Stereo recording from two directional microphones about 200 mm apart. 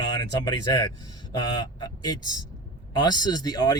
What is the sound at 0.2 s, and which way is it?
Speech, 20° left (ahead or behind).